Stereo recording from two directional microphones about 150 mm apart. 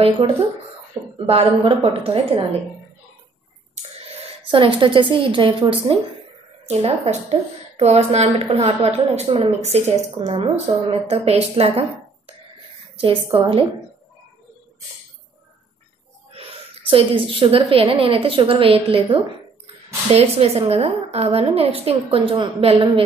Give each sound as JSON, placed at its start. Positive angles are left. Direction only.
{"t": 1.1, "sound": "a woman's voice", "side_deg": -40}
{"t": 4.5, "sound": "a woman's voice", "side_deg": -35}
{"t": 6.7, "sound": "a woman's voice", "side_deg": -45}
{"t": 12.9, "sound": "a woman's voice", "side_deg": -35}
{"t": 16.3, "sound": "a woman's voice", "side_deg": -40}